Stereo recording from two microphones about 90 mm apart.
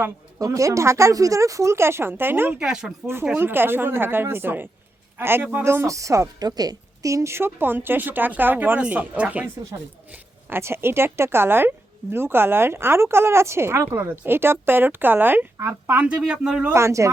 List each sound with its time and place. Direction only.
0.3 s speech: 40° right (ahead or behind); by 2.6 s 25° right (ahead or behind)
2.6 s speech: 5° right (ahead or behind)
3.3 s a woman's voice: 25° right (ahead or behind)
10.1 s a woman's voice: 25° right (ahead or behind)
16.0 s speech: 10° right (ahead or behind)
16.7 s speech: 30° right (ahead or behind)